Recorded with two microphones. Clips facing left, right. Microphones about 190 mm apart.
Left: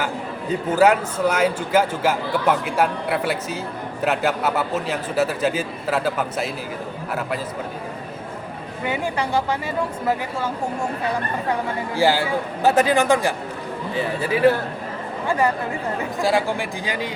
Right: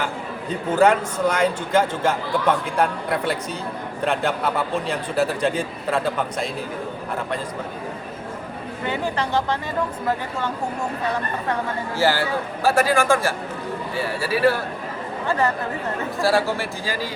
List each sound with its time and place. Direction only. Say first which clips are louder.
0.7 s a man's voice: even; 10° left (ahead or behind)
8.8 s a man's voice: left 1 dB; 10° left (ahead or behind)
11.9 s a man's voice: left 2 dB; 15° left (ahead or behind)